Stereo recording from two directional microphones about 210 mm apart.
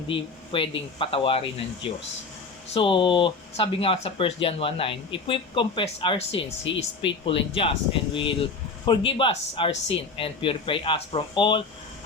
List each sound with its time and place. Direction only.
0.1 s speech: 25° left (ahead or behind)
2.7 s speech: 25° left (ahead or behind)